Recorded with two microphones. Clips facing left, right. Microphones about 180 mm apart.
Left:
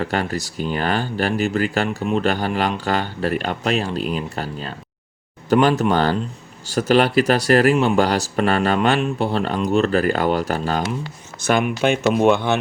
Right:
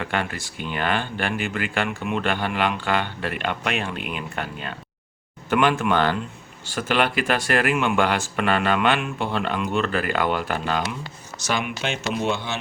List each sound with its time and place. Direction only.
0.0 s speech: 40° left (ahead or behind)
11.4 s speech: 50° left (ahead or behind)